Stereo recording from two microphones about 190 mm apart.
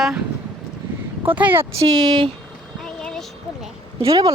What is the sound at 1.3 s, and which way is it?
Speech, 10° right (ahead or behind).